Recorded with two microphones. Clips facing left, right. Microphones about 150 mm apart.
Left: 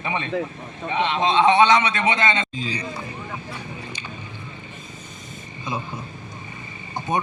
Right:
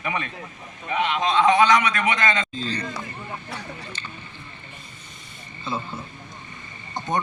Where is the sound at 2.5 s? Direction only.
10° left (ahead or behind).